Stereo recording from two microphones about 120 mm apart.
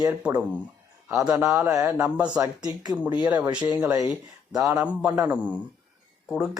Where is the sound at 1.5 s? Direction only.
20° right (ahead or behind).